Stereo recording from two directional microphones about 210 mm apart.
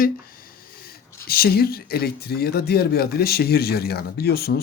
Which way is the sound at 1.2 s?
45° left (ahead or behind).